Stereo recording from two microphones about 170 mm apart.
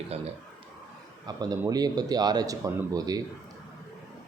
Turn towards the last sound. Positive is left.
turn(degrees=-20)  # may be behind; listen again after turning